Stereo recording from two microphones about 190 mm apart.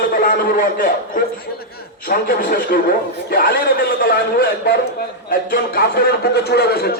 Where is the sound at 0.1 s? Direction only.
50° left (ahead or behind).